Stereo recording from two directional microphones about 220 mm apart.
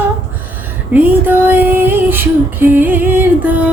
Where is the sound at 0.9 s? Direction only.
10° right (ahead or behind).